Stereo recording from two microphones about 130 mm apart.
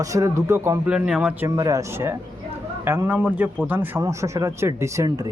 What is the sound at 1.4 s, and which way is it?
Speech, 25° right (ahead or behind).